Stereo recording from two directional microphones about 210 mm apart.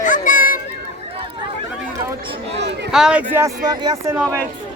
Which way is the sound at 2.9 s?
5° right (ahead or behind).